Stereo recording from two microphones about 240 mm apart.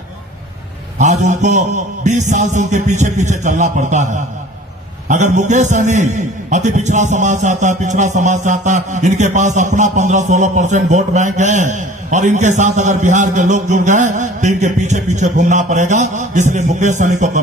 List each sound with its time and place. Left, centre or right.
0.9 s a man's voice: right